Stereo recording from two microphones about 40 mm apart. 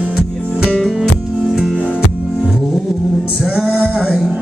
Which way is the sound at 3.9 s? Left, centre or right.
Centre.